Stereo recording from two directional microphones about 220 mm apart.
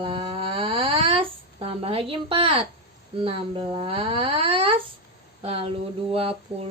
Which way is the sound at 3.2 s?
25° right (ahead or behind).